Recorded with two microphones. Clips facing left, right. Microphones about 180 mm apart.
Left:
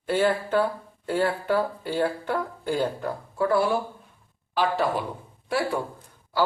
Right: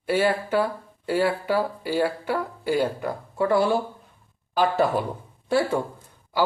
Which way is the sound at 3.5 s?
25° right (ahead or behind).